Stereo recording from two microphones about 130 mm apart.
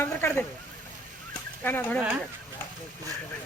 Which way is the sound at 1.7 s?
15° left (ahead or behind).